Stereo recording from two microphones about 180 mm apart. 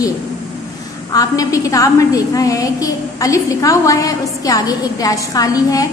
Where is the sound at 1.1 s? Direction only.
20° left (ahead or behind).